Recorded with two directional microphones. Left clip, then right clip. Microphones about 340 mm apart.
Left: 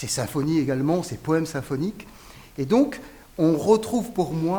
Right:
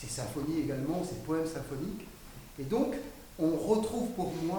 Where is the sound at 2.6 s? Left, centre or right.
Left.